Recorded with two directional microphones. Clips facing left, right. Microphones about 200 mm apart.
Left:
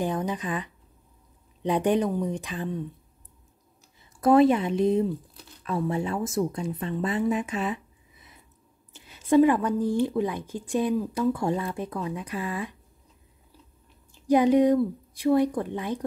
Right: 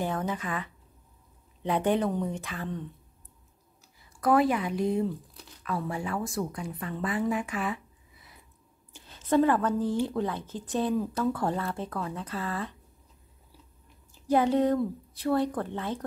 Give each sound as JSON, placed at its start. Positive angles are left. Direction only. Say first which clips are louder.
{"t": 0.0, "sound": "speech", "louder": "left 3 dB", "side_deg": 15}
{"t": 4.2, "sound": "a woman's voice", "louder": "left 5 dB", "side_deg": 25}
{"t": 14.2, "sound": "speech", "louder": "left 5 dB", "side_deg": 15}